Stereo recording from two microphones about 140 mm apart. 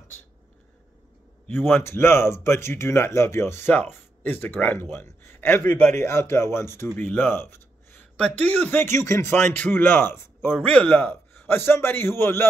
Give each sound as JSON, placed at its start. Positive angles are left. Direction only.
{"t": 1.5, "sound": "speech", "side_deg": 15}